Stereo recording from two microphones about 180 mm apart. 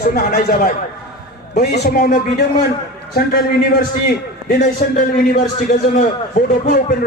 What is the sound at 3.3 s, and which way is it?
Speech, 55° left (ahead or behind).